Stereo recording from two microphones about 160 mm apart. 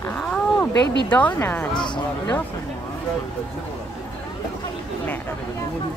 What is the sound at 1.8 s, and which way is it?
Speech, 30° left (ahead or behind).